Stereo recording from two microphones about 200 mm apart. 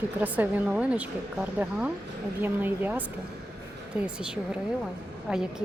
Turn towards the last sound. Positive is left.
turn(degrees=-5)  # may be behind; listen again after turning